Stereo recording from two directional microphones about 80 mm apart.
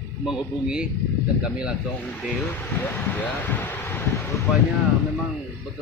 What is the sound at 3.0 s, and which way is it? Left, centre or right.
Speech, left.